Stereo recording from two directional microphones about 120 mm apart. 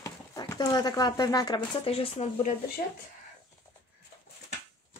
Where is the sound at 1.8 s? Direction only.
55° left (ahead or behind).